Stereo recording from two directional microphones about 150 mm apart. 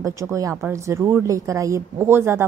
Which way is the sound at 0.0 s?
20° right (ahead or behind).